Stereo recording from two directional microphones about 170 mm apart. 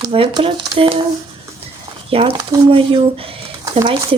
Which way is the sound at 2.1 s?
35° right (ahead or behind).